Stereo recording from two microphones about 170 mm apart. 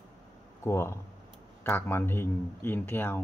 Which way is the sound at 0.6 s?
15° left (ahead or behind).